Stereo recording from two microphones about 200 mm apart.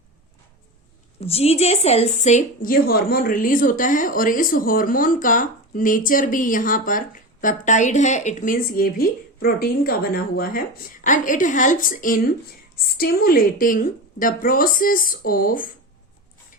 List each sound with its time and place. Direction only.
1.2 s speech: 30° left (ahead or behind); by 15.6 s 45° left (ahead or behind)